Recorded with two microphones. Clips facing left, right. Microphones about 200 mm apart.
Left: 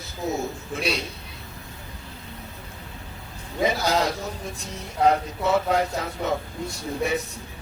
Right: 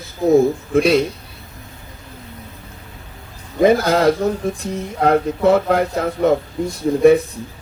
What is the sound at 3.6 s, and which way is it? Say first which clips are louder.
Speech: right 10 dB; 55° right (ahead or behind).